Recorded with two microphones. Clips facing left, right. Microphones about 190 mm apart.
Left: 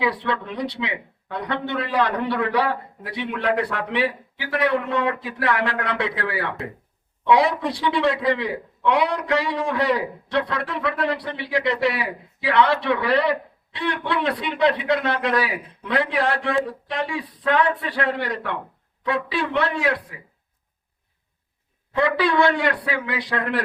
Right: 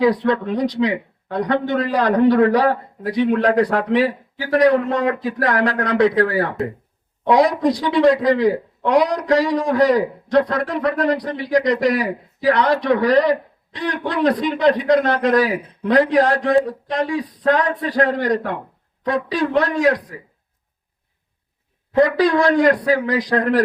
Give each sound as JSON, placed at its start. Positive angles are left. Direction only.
{"t": 0.0, "sound": "a man's voice", "side_deg": -40}
{"t": 21.9, "sound": "a man's voice", "side_deg": -40}